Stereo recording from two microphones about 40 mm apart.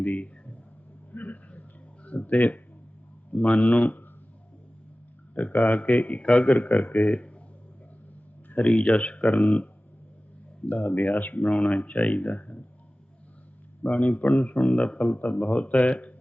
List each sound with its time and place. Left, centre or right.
0.0 s a sound: left
3.3 s a man's voice: left
5.3 s a man's voice: left
8.4 s a man's voice: left
10.7 s a man's voice: left
11.3 s a man's voice: left
13.8 s a man's voice: left
15.2 s a man's voice: left